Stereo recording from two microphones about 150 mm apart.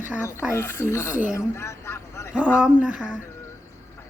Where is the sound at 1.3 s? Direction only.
20° left (ahead or behind).